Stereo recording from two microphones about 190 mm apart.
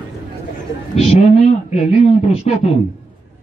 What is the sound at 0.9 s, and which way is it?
A man's voice, 35° left (ahead or behind).